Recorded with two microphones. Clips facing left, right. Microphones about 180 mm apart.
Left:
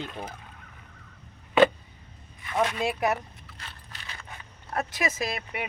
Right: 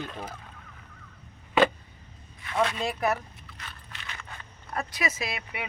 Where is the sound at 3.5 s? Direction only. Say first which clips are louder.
Right 1 dB; 40° left (ahead or behind).